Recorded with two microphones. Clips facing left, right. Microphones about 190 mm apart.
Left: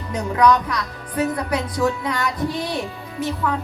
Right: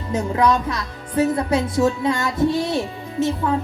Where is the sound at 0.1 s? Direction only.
25° right (ahead or behind).